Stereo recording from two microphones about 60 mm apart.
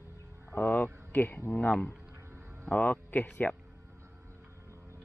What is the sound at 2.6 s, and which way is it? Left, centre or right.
Speech, left.